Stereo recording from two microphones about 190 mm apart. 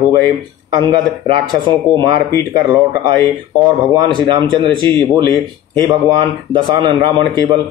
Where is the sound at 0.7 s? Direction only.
25° right (ahead or behind).